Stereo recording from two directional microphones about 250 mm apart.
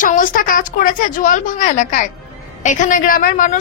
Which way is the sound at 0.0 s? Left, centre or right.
Left.